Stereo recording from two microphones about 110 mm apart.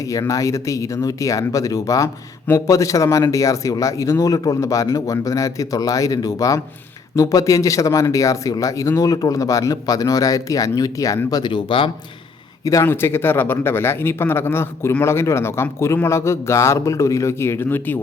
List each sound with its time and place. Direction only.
0.0 s speech: 30° left (ahead or behind)
11.5 s speech: 50° left (ahead or behind)
12.8 s speech: 20° left (ahead or behind)